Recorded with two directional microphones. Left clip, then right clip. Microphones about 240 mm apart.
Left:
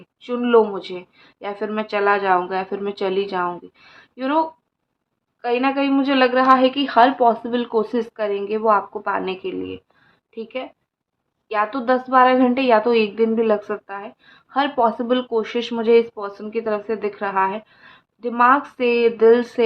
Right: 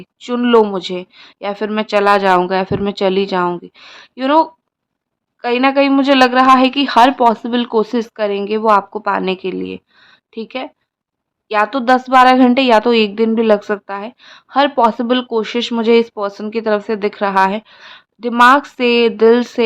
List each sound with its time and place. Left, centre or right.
0.2 s a woman's voice: right